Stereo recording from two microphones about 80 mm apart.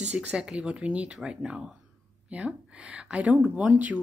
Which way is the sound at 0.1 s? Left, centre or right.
Centre.